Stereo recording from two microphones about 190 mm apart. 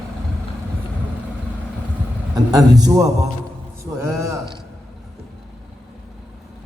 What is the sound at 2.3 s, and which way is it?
Speech, 20° right (ahead or behind).